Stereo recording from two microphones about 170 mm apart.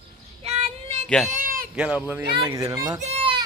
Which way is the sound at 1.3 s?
55° right (ahead or behind).